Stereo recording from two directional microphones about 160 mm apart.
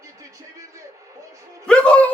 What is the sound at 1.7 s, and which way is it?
Music, 5° left (ahead or behind).